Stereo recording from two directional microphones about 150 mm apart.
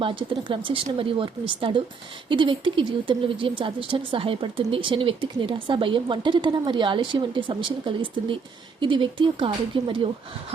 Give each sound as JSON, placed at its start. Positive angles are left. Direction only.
{"t": 0.0, "sound": "a woman's voice", "side_deg": -35}